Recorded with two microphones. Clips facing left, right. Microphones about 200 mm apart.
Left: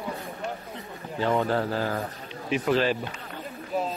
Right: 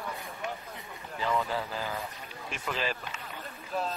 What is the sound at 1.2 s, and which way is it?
Speech, 35° left (ahead or behind).